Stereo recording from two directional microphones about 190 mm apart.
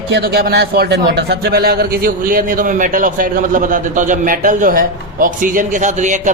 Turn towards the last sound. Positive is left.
turn(degrees=-40)  # may be behind; listen again after turning